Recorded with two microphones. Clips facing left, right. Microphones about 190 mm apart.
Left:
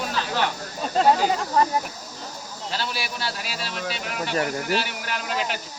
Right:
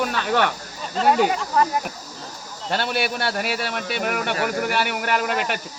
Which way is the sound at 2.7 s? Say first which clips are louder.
Right 7 dB; 60° right (ahead or behind).